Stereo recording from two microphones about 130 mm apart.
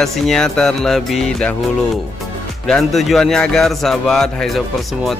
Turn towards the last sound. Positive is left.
turn(degrees=0)  # may be behind; listen again after turning